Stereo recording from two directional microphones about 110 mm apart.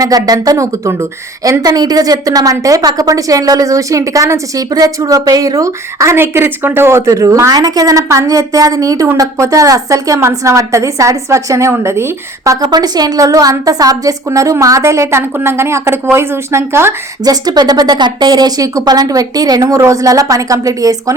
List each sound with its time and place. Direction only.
0.0 s a woman's voice: 35° right (ahead or behind)
12.6 s a woman's voice: 40° right (ahead or behind)
17.2 s a woman's voice: 35° right (ahead or behind)